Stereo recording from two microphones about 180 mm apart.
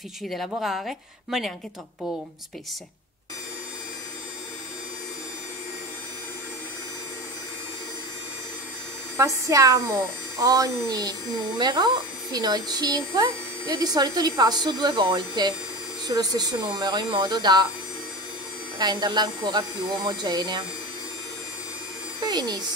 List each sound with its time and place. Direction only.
0.3 s a woman's voice: centre (ahead or behind)
9.1 s a woman's voice: 15° right (ahead or behind)
18.8 s speech: 25° right (ahead or behind)
22.2 s speech: 25° right (ahead or behind)